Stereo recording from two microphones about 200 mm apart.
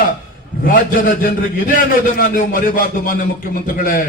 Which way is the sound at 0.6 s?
45° left (ahead or behind).